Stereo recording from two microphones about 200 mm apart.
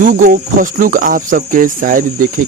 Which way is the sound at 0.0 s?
40° right (ahead or behind).